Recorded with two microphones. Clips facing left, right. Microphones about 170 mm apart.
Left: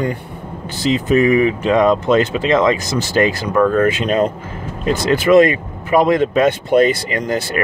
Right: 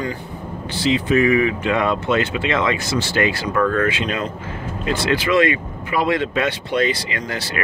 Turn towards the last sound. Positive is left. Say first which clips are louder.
# left 7 dB
turn(degrees=45)  # may be behind; listen again after turning